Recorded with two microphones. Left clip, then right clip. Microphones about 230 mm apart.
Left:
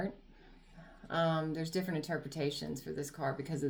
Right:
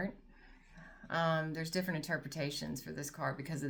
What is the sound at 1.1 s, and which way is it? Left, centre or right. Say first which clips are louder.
Speech: left 1 dB; right.